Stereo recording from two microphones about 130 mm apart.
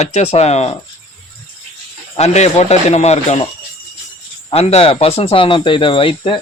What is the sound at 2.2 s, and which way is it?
Speech, 60° left (ahead or behind).